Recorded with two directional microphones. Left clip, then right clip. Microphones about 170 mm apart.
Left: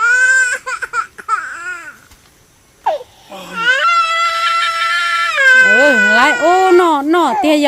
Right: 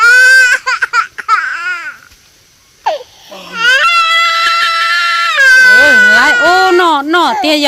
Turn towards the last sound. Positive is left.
turn(degrees=10)  # may be behind; listen again after turning